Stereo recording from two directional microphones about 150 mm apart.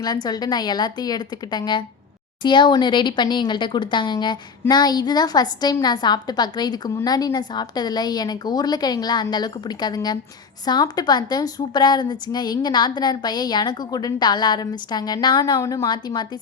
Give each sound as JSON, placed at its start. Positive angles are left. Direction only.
{"t": 0.0, "sound": "a woman's voice", "side_deg": 25}